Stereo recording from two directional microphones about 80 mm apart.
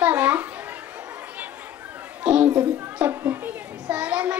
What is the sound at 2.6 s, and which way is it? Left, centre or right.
Children playing, centre.